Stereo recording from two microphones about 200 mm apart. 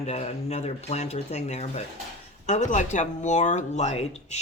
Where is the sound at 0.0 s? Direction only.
30° left (ahead or behind).